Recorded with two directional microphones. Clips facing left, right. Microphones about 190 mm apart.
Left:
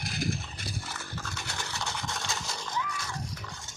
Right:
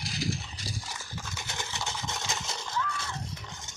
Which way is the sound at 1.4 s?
20° right (ahead or behind).